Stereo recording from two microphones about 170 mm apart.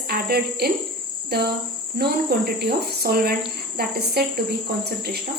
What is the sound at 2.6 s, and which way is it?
Cricket, 70° right (ahead or behind).